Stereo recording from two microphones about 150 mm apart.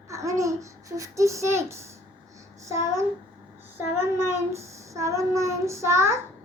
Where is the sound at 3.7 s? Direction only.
15° right (ahead or behind).